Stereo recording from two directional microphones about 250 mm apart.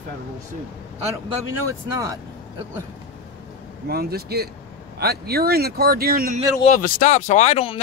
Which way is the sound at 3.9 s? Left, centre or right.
Right.